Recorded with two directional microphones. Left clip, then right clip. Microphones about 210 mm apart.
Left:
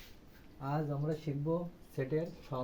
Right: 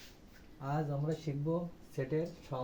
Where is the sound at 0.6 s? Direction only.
10° left (ahead or behind).